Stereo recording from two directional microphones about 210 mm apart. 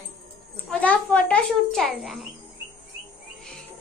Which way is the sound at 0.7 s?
5° left (ahead or behind).